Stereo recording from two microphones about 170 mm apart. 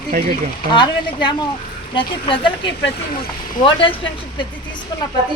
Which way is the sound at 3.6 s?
30° left (ahead or behind).